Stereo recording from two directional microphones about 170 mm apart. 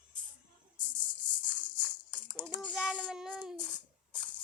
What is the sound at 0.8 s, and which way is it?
Rattle, 25° left (ahead or behind).